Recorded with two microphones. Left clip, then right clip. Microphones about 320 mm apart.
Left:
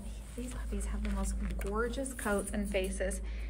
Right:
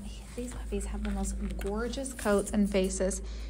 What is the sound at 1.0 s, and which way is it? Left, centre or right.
Speech, centre.